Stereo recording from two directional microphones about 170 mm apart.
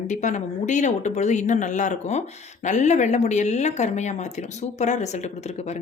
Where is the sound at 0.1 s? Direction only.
45° left (ahead or behind).